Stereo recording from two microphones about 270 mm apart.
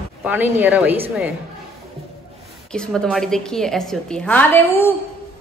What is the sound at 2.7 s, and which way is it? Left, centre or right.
A woman's voice, centre.